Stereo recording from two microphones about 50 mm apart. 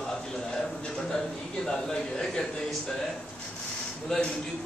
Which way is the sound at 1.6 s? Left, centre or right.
Centre.